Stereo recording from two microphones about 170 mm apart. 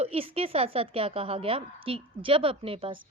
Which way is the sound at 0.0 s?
35° right (ahead or behind).